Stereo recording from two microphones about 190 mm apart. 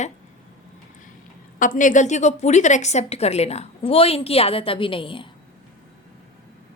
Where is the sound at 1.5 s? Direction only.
45° left (ahead or behind); by 5.3 s 25° left (ahead or behind).